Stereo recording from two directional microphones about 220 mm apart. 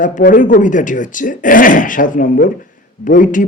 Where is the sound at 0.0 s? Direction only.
35° left (ahead or behind).